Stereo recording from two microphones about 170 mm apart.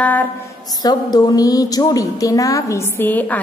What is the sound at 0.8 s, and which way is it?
A woman's voice, 25° left (ahead or behind).